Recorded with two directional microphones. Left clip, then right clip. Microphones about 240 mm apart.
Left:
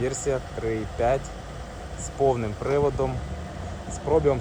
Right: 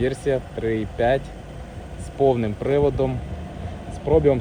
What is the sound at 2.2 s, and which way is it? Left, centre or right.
Speech, left.